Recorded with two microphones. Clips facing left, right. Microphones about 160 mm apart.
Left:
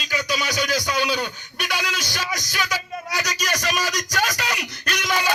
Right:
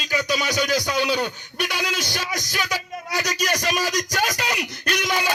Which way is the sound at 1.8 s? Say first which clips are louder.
Right 2 dB; 30° right (ahead or behind).